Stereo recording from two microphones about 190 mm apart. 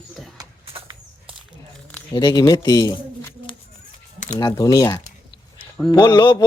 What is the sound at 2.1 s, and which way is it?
Speech, 20° left (ahead or behind).